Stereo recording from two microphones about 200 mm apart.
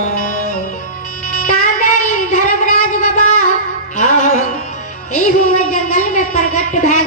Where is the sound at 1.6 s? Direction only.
40° left (ahead or behind).